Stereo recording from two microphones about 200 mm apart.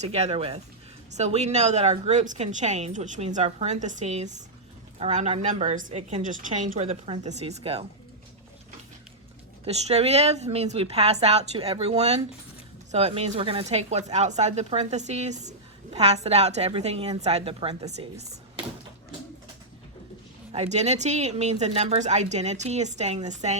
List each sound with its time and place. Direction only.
0.0 s speech: 30° right (ahead or behind)
9.6 s speech: 30° right (ahead or behind)
20.5 s speech: 30° right (ahead or behind)